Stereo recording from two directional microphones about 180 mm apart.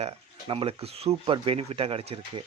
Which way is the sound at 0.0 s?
30° right (ahead or behind).